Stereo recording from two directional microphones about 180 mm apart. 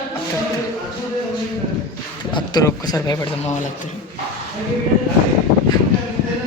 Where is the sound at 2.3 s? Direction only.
20° left (ahead or behind).